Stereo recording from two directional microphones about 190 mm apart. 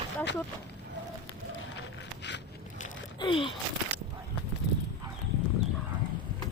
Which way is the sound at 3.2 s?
25° left (ahead or behind).